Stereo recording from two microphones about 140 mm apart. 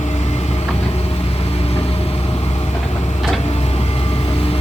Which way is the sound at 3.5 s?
50° left (ahead or behind).